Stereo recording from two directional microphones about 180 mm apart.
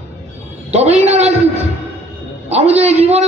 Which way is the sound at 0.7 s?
35° right (ahead or behind).